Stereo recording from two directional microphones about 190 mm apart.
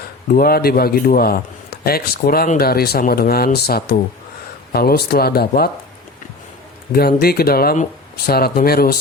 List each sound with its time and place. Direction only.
0.3 s speech: 50° left (ahead or behind)
7.2 s speech: 55° left (ahead or behind)